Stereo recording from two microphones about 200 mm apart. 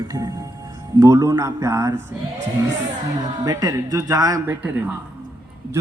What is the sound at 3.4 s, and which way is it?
A man's voice, 20° right (ahead or behind).